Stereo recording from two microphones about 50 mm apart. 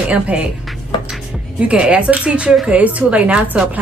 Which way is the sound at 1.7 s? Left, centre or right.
Right.